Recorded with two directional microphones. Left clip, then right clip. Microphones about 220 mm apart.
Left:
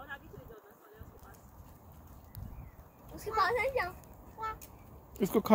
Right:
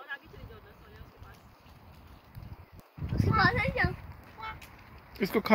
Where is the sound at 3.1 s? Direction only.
65° left (ahead or behind).